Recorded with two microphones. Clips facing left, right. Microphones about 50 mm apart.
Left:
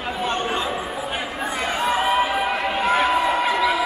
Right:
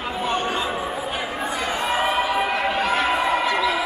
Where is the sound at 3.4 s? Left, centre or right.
Centre.